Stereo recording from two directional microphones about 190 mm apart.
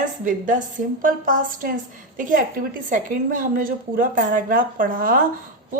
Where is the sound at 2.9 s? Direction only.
45° right (ahead or behind).